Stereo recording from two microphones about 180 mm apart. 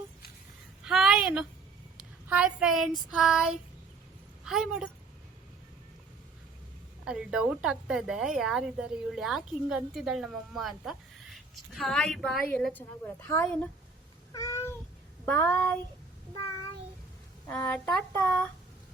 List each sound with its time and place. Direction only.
0.9 s a sound: centre (ahead or behind)
2.0 s child singing: 5° right (ahead or behind)
4.4 s a woman's voice: centre (ahead or behind)
7.0 s a woman's voice: 5° right (ahead or behind)
14.3 s cat: 15° left (ahead or behind)
15.3 s child singing: 15° left (ahead or behind)
18.1 s child singing: 10° left (ahead or behind)